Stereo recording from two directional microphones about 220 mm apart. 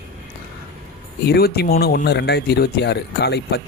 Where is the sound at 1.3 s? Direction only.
45° left (ahead or behind).